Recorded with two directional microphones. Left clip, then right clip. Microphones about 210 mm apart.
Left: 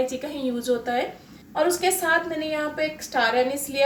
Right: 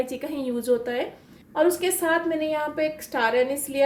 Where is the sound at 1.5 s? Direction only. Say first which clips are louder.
Even; 45° right (ahead or behind).